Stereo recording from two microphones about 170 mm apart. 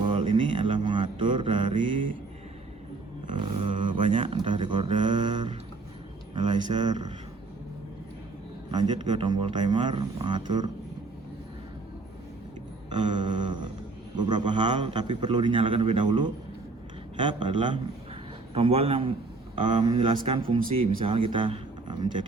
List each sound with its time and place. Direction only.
0.0 s mantra: 30° right (ahead or behind)
3.3 s a sound: 35° right (ahead or behind)
8.7 s a man's voice: 25° right (ahead or behind)
12.9 s a man's voice: 25° right (ahead or behind)
17.4 s a man's voice: 30° right (ahead or behind)